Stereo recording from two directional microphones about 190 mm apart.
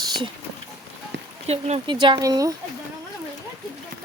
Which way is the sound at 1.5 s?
35° right (ahead or behind).